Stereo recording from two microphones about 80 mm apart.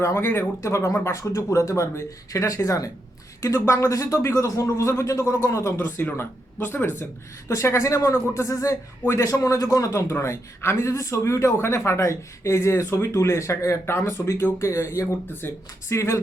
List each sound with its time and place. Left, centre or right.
0.0 s a man's voice: left
5.8 s speech: left
7.4 s a man's voice: left